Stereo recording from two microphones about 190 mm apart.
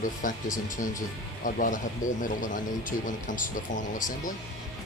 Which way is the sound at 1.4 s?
45° left (ahead or behind).